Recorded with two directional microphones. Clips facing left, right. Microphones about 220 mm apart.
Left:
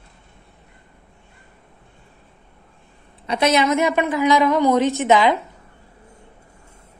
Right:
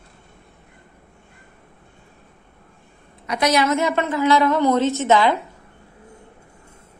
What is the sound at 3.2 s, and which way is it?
A woman's voice, 25° left (ahead or behind).